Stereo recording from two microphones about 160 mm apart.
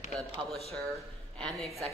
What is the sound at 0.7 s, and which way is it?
A woman's voice, 5° left (ahead or behind).